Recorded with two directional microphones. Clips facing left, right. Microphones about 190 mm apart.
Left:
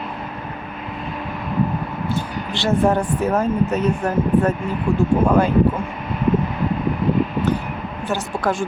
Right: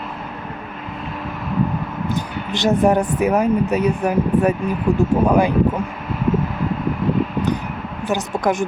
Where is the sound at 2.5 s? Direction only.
20° right (ahead or behind).